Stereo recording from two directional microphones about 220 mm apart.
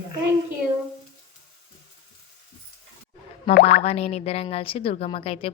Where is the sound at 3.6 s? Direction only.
45° left (ahead or behind).